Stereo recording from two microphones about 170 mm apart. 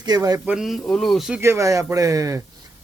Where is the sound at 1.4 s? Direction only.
15° right (ahead or behind).